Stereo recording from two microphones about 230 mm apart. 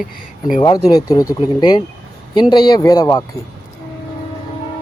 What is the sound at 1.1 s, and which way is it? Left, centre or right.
Speech, centre.